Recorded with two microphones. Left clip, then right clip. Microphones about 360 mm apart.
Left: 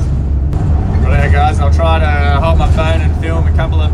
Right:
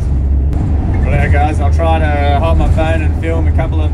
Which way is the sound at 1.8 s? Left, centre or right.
Centre.